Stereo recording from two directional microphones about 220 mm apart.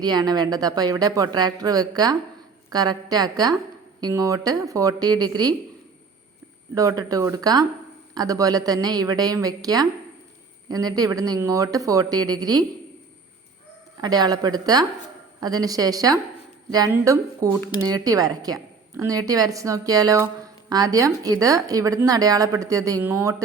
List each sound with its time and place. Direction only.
0.0 s a woman's voice: 20° right (ahead or behind)
6.7 s a woman's voice: 15° right (ahead or behind)
14.0 s a woman's voice: 20° right (ahead or behind)